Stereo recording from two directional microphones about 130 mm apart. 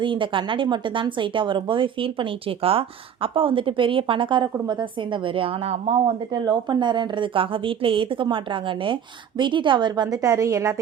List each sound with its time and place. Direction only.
0.0 s a woman's voice: 40° right (ahead or behind)
6.4 s a woman's voice: 35° right (ahead or behind)